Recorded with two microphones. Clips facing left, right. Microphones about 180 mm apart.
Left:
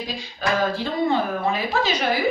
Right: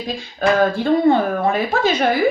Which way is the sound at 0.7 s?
55° right (ahead or behind).